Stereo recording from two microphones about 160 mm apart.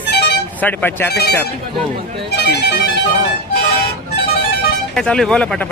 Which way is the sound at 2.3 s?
90° left.